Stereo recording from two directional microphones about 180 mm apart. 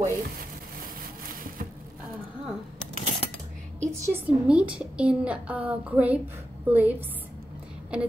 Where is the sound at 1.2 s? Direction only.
55° right (ahead or behind).